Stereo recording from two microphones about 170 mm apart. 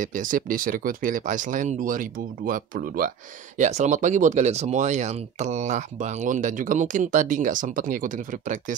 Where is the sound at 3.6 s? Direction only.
45° right (ahead or behind).